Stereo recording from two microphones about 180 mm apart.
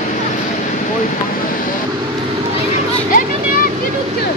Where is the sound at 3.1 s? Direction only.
50° left (ahead or behind).